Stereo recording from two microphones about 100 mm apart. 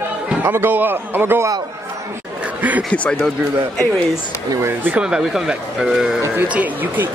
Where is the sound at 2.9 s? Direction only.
10° left (ahead or behind).